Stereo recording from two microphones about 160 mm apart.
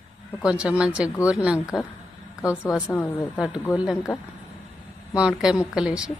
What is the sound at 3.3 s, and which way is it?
Speech, 5° right (ahead or behind).